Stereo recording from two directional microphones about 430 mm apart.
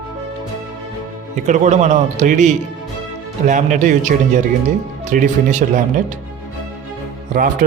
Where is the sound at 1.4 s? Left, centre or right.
Centre.